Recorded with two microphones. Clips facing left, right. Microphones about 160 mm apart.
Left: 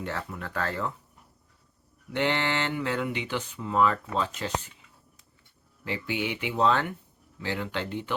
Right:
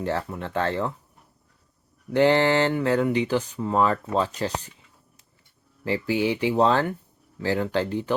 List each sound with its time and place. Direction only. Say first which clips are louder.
0.0 s speech: right 7 dB; 30° right (ahead or behind)
2.0 s speech: right 9 dB; 35° right (ahead or behind)
5.8 s speech: right 7 dB; 35° right (ahead or behind)